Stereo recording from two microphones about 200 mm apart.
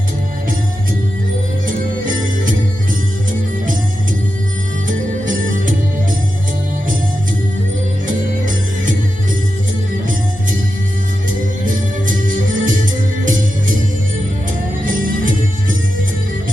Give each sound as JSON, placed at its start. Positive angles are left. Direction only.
{"t": 4.9, "sound": "music", "side_deg": -40}
{"t": 8.4, "sound": "music", "side_deg": -40}
{"t": 11.6, "sound": "music", "side_deg": -40}
{"t": 14.8, "sound": "music", "side_deg": -40}